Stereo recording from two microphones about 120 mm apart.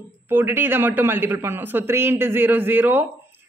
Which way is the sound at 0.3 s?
15° right (ahead or behind).